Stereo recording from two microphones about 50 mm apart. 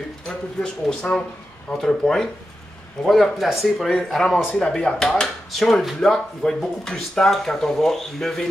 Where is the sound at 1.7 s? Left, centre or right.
Centre.